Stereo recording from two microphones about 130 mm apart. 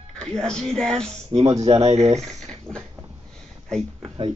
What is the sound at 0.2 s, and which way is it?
Speech, 5° left (ahead or behind).